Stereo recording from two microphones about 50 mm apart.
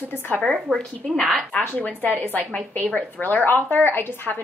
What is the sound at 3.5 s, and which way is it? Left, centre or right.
Speech, left.